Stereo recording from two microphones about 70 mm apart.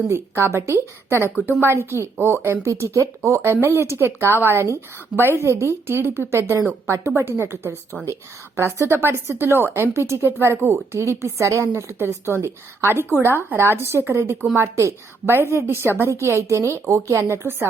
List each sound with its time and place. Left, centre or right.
0.1 s a woman's voice: right